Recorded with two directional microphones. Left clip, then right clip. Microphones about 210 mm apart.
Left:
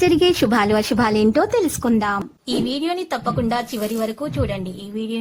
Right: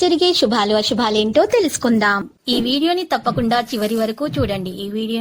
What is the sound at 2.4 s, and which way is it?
Speech, 20° right (ahead or behind).